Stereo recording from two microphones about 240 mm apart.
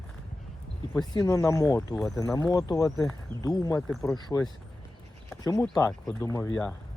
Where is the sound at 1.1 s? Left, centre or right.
Centre.